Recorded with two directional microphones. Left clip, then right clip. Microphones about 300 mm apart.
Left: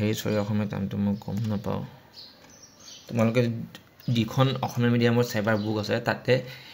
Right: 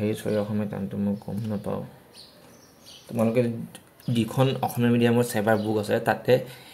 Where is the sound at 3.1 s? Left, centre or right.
Left.